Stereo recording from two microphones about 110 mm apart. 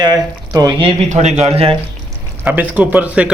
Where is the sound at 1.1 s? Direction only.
90° right; by 1.7 s 70° right (ahead or behind).